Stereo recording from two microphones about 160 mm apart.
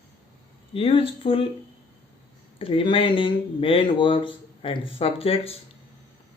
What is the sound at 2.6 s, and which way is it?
Speech, 35° left (ahead or behind).